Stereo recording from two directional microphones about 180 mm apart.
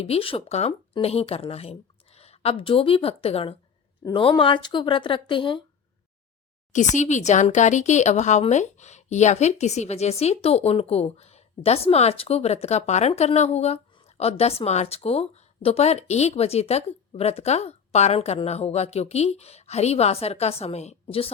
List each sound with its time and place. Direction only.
0.0 s speech: 35° left (ahead or behind)
6.7 s speech: 40° left (ahead or behind)